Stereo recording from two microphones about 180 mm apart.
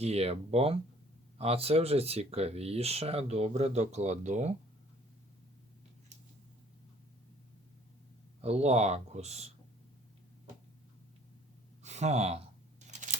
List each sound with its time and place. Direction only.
0.0 s speech: 35° right (ahead or behind)
8.4 s speech: 35° right (ahead or behind)
11.8 s speech: 40° right (ahead or behind)
12.9 s scissors: 40° right (ahead or behind)